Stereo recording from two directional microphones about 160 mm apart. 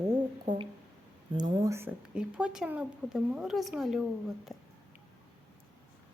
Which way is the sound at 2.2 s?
5° right (ahead or behind).